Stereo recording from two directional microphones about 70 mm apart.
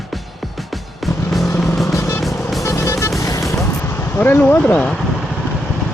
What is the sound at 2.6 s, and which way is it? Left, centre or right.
Music, left.